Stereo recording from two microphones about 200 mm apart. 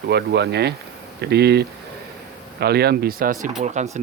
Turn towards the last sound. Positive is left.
turn(degrees=-35)  # may be behind; listen again after turning